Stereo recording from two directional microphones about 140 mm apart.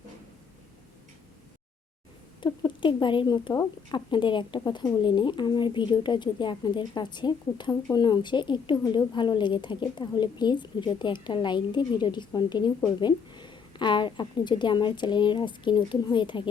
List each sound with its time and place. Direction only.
2.4 s a woman's voice: 35° left (ahead or behind)